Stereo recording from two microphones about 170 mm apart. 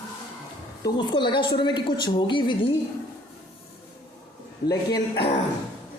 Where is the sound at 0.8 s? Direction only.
25° left (ahead or behind).